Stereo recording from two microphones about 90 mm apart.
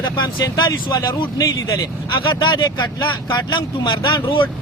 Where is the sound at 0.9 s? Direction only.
50° left (ahead or behind).